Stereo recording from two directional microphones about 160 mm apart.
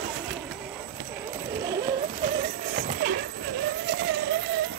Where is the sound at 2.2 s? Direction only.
65° right (ahead or behind).